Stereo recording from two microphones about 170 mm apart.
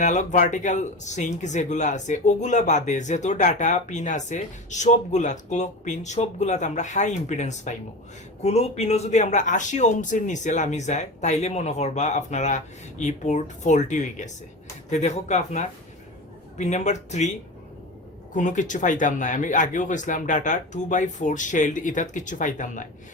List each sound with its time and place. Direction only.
0.0 s speech: 45° left (ahead or behind)
18.3 s speech: 45° left (ahead or behind)